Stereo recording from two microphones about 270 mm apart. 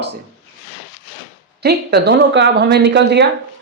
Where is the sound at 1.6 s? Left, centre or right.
Right.